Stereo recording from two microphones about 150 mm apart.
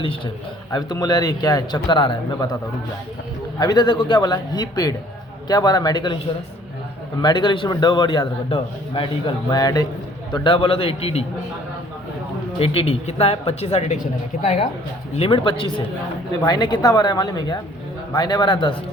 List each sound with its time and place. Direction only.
0.7 s a man's voice: 30° left (ahead or behind)
3.6 s a man's voice: 25° left (ahead or behind)
7.2 s a man's voice: 30° left (ahead or behind)
12.5 s speech: 40° left (ahead or behind)
15.1 s a man's voice: 40° left (ahead or behind)